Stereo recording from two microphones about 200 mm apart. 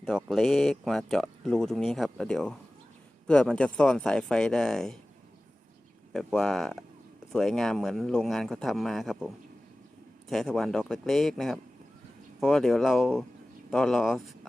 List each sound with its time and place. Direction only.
0.0 s speech: centre (ahead or behind)
6.1 s speech: centre (ahead or behind)